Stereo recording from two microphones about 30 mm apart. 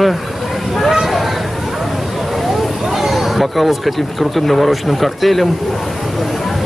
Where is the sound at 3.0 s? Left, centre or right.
Centre.